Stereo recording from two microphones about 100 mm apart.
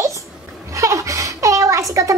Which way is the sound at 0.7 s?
35° right (ahead or behind).